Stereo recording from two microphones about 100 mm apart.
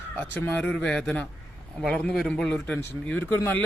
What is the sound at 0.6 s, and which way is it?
A man's voice, 10° left (ahead or behind).